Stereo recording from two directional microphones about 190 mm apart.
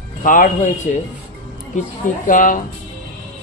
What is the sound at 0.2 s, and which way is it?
A man's voice, 45° left (ahead or behind).